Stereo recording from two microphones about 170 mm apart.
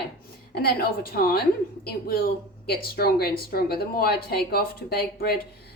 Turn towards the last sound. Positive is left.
turn(degrees=70)  # may be behind; listen again after turning